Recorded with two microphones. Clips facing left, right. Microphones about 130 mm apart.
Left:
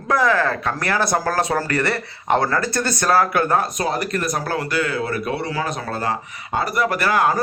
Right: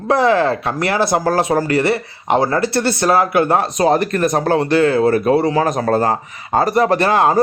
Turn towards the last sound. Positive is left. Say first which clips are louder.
# right 5 dB
turn(degrees=-30)  # may be behind; listen again after turning